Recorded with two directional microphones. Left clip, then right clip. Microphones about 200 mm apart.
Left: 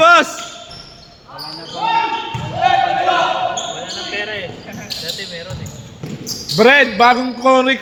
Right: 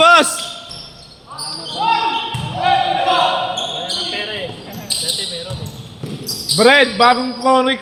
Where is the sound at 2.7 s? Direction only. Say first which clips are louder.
Left 1 dB; 50° left (ahead or behind).